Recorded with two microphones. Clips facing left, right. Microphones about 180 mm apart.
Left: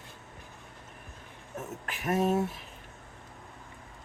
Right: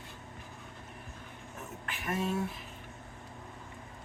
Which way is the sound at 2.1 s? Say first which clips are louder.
Left 7 dB; 45° left (ahead or behind).